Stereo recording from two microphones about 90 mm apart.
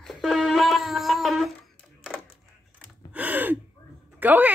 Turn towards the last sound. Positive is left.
turn(degrees=-20)  # may be behind; listen again after turning